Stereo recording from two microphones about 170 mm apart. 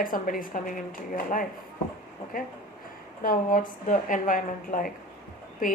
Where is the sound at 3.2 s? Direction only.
55° left (ahead or behind).